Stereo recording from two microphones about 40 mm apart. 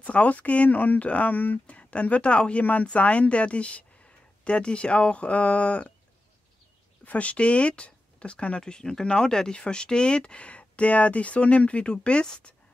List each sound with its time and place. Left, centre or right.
0.0 s speech: left
1.7 s speech: left
7.1 s speech: left